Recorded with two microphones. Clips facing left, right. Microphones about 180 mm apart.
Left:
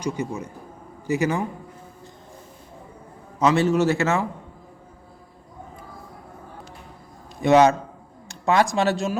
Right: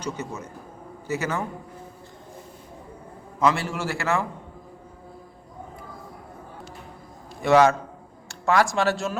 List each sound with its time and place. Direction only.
0.0 s speech: 15° left (ahead or behind)
3.4 s a man's voice: 20° left (ahead or behind)
7.4 s a man's voice: 20° left (ahead or behind)